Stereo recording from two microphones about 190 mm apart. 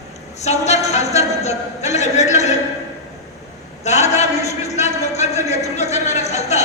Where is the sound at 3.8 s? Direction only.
35° left (ahead or behind).